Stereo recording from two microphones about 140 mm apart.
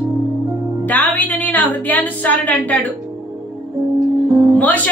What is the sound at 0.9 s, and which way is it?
A woman's voice, 15° left (ahead or behind).